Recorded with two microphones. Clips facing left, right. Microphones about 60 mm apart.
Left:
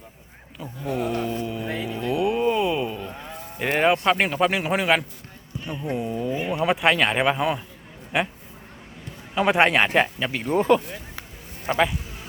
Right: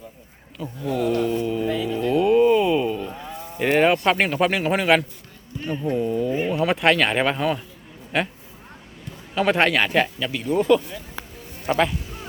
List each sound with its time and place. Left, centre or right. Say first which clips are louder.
0.6 s a man's voice: right 3 dB; centre
1.6 s speech: right 5 dB; left
2.0 s cattle: right 6 dB; centre
3.6 s a man's voice: right 2 dB; centre
6.7 s speech: right 2 dB; centre
9.3 s speech: even; centre; by 11.0 s left
11.6 s speech: right 1 dB; centre